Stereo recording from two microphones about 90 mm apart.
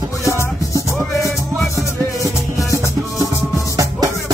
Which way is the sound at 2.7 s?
35° left (ahead or behind).